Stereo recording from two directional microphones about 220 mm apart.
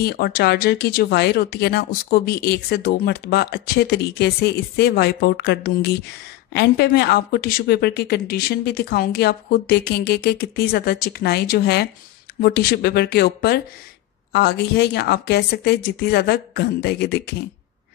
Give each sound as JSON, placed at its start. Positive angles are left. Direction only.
{"t": 0.0, "sound": "speech", "side_deg": 45}